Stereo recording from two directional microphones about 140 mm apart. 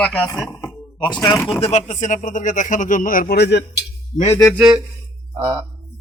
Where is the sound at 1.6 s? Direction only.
55° left (ahead or behind); by 3.7 s 90° left.